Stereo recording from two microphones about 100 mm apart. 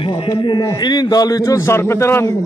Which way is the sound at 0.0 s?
60° left (ahead or behind).